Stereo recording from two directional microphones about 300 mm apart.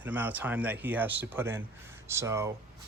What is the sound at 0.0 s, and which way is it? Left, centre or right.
Speech, centre.